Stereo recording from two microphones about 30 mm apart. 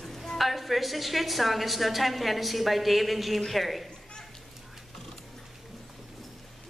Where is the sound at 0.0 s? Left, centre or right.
Centre.